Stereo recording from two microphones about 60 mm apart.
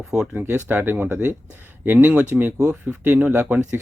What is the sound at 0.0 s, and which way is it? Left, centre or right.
Speech, centre.